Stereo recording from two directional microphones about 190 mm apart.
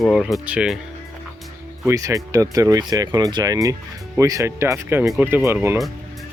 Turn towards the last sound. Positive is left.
turn(degrees=-10)  # may be behind; listen again after turning